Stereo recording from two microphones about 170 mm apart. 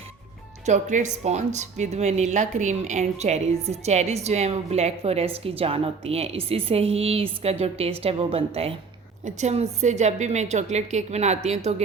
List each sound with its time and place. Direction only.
0.6 s speech: 45° right (ahead or behind)